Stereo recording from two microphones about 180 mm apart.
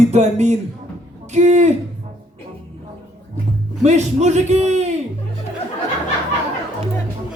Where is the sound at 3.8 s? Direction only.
40° right (ahead or behind).